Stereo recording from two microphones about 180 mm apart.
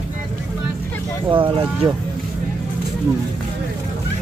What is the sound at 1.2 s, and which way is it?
Speech, 25° right (ahead or behind).